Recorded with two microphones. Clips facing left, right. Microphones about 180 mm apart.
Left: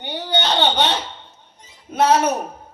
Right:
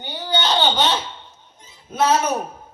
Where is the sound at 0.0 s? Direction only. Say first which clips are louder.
Left 1 dB; 60° left (ahead or behind).